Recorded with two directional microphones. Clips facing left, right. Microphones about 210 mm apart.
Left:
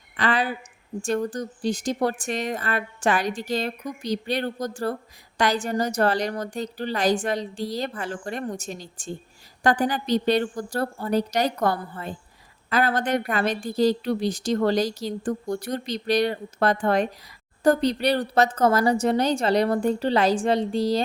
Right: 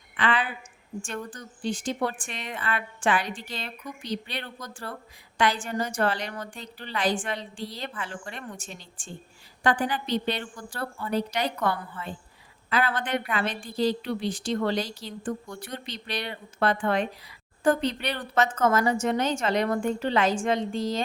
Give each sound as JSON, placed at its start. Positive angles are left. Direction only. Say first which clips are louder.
{"t": 0.2, "sound": "a woman's voice", "louder": "left 3 dB", "side_deg": 40}